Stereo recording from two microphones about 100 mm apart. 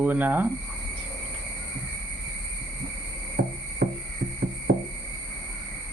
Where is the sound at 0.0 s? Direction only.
20° right (ahead or behind).